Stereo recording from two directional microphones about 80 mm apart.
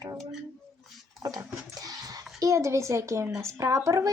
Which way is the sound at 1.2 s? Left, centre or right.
Right.